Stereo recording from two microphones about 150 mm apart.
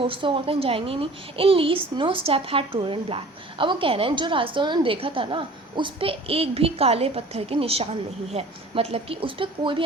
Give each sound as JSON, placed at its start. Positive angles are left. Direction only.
{"t": 0.0, "sound": "a woman's voice", "side_deg": -35}